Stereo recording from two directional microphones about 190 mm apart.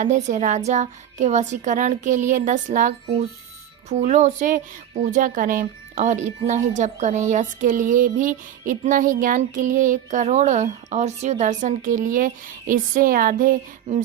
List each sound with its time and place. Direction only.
0.0 s a woman's voice: 40° right (ahead or behind)